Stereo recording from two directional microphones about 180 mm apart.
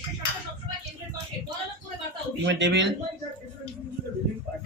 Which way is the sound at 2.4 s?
85° right.